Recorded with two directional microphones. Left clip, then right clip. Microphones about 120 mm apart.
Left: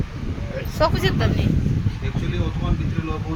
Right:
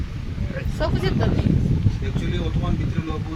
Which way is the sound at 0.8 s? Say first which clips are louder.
Left 5 dB; 65° left (ahead or behind).